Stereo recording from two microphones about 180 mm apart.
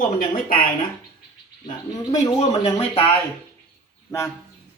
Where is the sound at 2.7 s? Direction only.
30° left (ahead or behind).